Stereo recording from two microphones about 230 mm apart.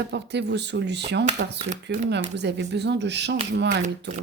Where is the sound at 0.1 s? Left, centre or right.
Right.